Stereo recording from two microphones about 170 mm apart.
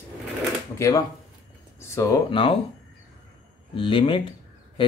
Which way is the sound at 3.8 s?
30° left (ahead or behind).